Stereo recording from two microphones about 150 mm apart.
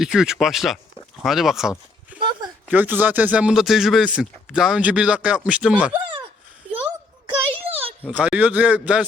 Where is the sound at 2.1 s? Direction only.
35° right (ahead or behind).